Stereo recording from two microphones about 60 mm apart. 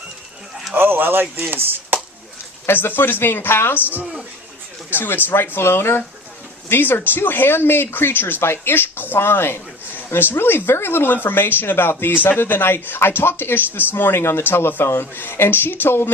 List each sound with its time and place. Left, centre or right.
0.7 s speech: right
2.6 s speech: left
4.0 s a sound: centre
4.9 s speech: left